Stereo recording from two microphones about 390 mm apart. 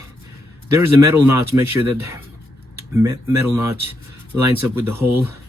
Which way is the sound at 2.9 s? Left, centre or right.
Centre.